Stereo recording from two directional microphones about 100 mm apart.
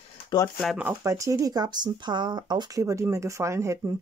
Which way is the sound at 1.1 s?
35° right (ahead or behind).